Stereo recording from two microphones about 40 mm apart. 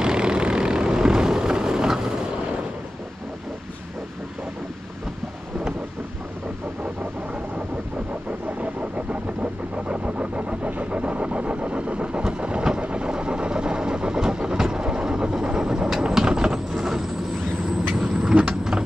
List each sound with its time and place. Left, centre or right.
0.0 s vehicle: centre
8.3 s vehicle: right; by 18.4 s centre
18.5 s a sound: centre